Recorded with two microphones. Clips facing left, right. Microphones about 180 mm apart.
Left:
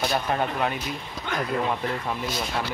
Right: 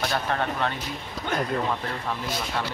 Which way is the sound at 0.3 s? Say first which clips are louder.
Left 1 dB; 10° left (ahead or behind).